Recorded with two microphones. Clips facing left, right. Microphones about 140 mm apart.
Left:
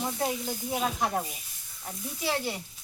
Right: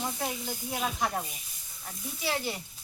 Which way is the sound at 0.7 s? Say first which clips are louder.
Left 3 dB; 10° left (ahead or behind).